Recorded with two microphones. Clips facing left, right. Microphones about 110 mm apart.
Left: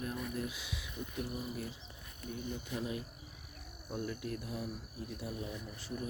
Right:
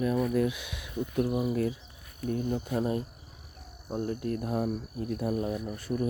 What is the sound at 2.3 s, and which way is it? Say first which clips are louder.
Speech: right 11 dB; 45° right (ahead or behind).